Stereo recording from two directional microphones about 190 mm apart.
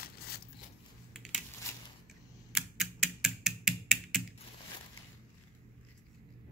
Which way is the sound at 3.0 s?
Centre (ahead or behind).